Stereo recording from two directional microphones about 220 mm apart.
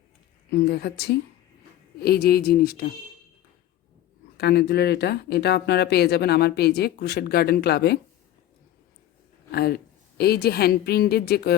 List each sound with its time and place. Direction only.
0.7 s speech: 45° left (ahead or behind)
4.4 s speech: 50° left (ahead or behind)
9.5 s speech: 45° left (ahead or behind)